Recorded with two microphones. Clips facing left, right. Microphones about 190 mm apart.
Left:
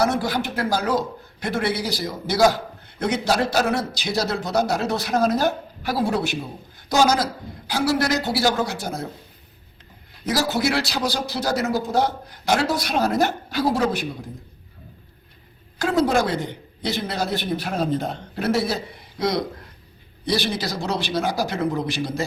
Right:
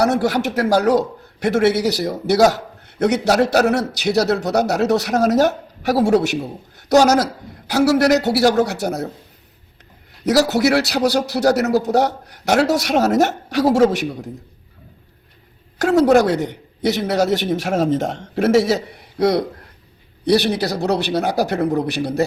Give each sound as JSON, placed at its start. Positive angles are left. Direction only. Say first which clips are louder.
{"t": 0.0, "sound": "a man's voice", "louder": "right 5 dB", "side_deg": -70}
{"t": 10.2, "sound": "a man's voice", "louder": "right 7 dB", "side_deg": -70}
{"t": 15.8, "sound": "a man's voice", "louder": "right 7 dB", "side_deg": -70}